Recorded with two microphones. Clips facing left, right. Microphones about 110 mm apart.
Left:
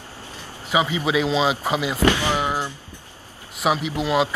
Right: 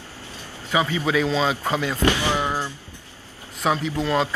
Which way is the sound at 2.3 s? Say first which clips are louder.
Left 1 dB; 15° left (ahead or behind).